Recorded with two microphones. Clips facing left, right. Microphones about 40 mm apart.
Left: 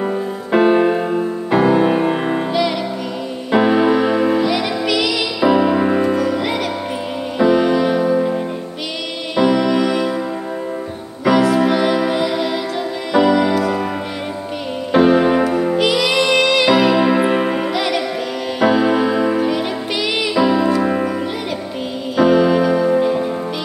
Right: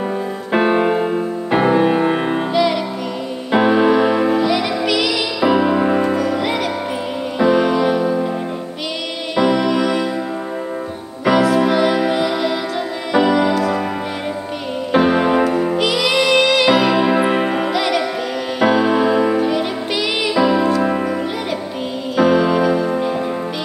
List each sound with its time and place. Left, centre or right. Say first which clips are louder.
0.5 s music: left 2 dB; right
3.5 s music: even; centre
9.4 s music: left 1 dB; centre
11.2 s music: even; centre
15.0 s music: left 2 dB; centre
22.1 s music: left 1 dB; centre